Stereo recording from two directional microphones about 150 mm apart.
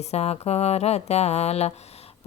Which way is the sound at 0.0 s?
45° left (ahead or behind).